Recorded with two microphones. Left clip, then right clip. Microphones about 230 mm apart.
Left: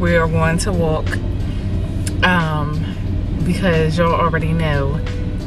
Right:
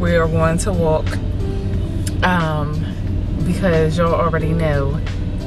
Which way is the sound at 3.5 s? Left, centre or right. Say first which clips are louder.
Even; centre.